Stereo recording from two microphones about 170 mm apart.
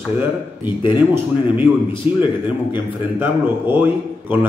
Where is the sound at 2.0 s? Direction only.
35° left (ahead or behind).